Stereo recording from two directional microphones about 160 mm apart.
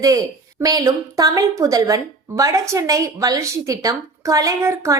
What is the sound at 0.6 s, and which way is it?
A woman's voice, 20° right (ahead or behind).